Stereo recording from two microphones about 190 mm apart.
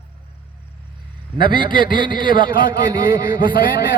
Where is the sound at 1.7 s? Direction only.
45° left (ahead or behind).